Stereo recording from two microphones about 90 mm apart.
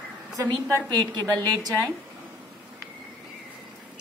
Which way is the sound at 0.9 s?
50° right (ahead or behind).